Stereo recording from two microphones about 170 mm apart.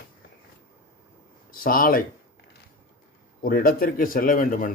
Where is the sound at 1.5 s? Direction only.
55° left (ahead or behind).